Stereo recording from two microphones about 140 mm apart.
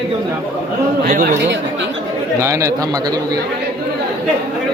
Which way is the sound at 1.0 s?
85° right.